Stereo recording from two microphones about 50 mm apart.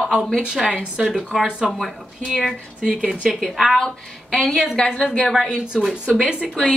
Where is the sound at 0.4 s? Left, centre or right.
Centre.